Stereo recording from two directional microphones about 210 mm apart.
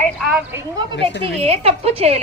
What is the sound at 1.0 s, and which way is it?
Speech, 55° left (ahead or behind).